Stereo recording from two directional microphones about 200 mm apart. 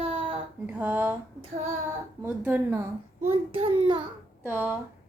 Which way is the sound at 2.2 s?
10° right (ahead or behind).